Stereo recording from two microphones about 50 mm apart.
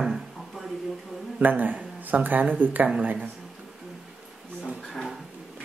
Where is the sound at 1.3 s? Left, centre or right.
Right.